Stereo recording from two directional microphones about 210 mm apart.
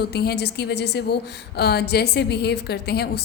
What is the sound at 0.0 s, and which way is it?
A woman's voice, 50° left (ahead or behind).